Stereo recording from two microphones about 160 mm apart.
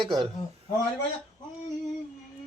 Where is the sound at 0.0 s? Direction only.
30° right (ahead or behind).